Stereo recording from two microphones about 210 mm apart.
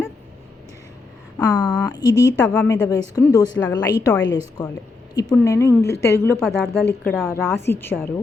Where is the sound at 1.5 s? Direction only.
20° left (ahead or behind).